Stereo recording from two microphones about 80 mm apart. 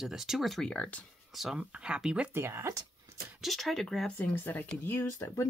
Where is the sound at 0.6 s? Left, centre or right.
Centre.